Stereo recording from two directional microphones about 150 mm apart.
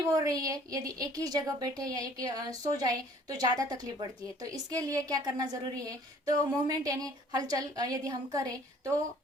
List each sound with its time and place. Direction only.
0.2 s a woman's voice: 25° right (ahead or behind)